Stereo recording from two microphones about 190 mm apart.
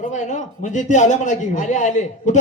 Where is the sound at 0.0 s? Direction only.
40° left (ahead or behind).